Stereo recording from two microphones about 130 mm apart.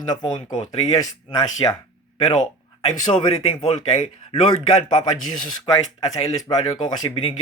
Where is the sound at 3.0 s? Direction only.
60° left (ahead or behind).